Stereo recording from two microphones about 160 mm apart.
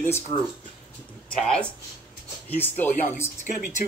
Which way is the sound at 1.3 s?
5° left (ahead or behind).